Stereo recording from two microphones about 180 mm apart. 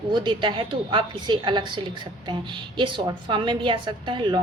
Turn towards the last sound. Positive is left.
turn(degrees=-25)  # may be behind; listen again after turning